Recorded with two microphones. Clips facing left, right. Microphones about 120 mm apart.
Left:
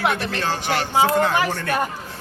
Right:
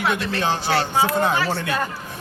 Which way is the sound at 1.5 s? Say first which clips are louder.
Right 1 dB; 15° right (ahead or behind).